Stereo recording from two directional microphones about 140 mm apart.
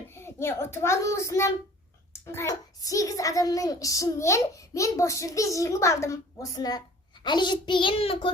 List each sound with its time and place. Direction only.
0.1 s a child's voice: 15° left (ahead or behind)
7.3 s child singing: 30° left (ahead or behind)